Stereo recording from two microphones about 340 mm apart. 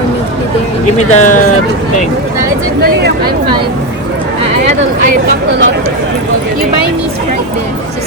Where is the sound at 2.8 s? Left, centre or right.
Right.